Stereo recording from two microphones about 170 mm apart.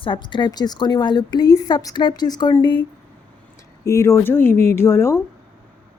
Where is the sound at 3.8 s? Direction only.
15° left (ahead or behind).